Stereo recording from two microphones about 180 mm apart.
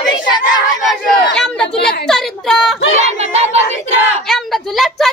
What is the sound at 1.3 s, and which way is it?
Chatter, 5° left (ahead or behind).